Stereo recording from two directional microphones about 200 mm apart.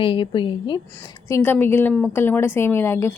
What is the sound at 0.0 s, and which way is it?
Speech, 25° left (ahead or behind).